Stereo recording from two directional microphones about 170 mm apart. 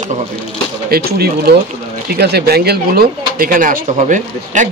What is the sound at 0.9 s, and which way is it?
Speech, 70° right (ahead or behind).